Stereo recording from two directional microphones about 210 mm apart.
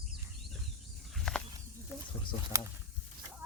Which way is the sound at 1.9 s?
10° right (ahead or behind).